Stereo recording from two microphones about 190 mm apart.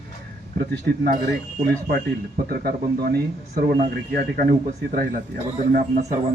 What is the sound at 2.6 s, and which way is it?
Speech, 55° right (ahead or behind).